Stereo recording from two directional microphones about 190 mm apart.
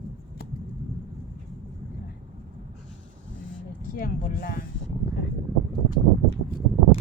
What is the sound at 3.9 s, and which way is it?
Speech, 50° left (ahead or behind).